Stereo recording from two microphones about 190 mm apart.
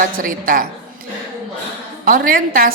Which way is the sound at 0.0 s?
45° right (ahead or behind).